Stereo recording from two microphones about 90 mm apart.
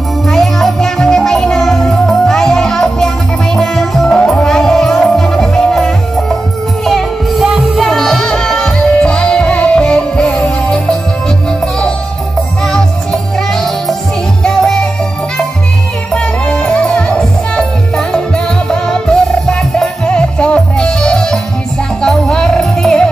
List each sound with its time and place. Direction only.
0.3 s music: centre (ahead or behind)
12.6 s music: 5° left (ahead or behind)
16.1 s music: 10° left (ahead or behind)